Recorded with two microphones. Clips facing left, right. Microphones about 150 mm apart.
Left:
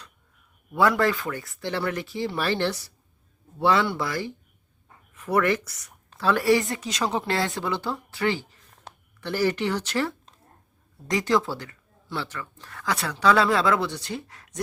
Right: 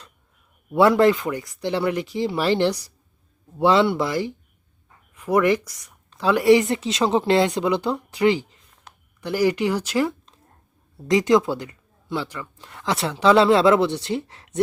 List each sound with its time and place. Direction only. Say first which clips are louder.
0.7 s speech: right 6 dB; 25° right (ahead or behind)